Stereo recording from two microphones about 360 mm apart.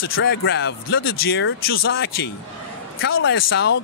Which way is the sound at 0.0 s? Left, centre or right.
Left.